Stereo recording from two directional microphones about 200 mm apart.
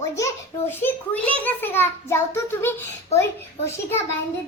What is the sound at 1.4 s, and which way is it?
A child's voice, 10° left (ahead or behind).